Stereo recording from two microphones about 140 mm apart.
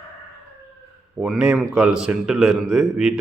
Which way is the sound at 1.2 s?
5° right (ahead or behind).